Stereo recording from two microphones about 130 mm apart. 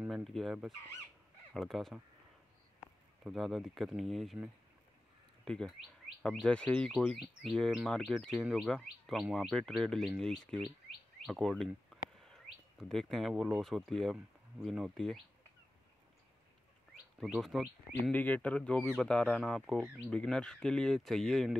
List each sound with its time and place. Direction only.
0.1 s speech: centre (ahead or behind)
3.3 s speech: centre (ahead or behind)
5.4 s speech: 5° left (ahead or behind)
11.9 s a sound: centre (ahead or behind)
14.6 s speech: centre (ahead or behind)
17.2 s speech: centre (ahead or behind)
18.1 s speech: 10° left (ahead or behind)